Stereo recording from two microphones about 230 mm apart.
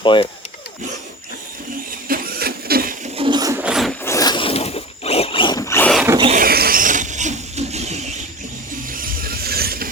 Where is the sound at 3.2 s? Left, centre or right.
Centre.